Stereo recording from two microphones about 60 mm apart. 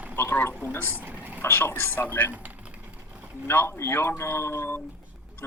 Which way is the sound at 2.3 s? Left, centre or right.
Right.